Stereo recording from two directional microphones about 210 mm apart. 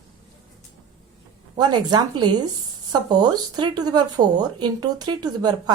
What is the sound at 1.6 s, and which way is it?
Speech, 20° right (ahead or behind).